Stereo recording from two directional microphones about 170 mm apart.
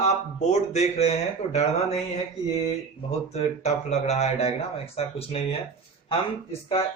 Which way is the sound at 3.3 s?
40° left (ahead or behind).